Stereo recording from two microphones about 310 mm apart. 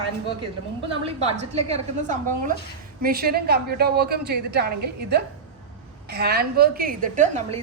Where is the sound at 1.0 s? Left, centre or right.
Centre.